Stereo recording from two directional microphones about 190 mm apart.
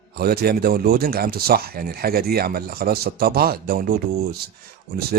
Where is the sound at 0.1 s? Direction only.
55° right (ahead or behind).